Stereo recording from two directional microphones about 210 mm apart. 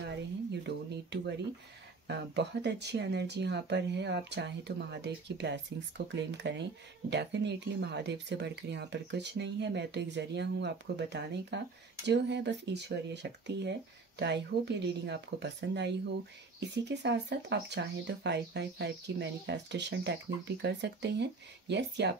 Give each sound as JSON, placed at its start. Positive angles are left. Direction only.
{"t": 0.7, "sound": "speech", "side_deg": -55}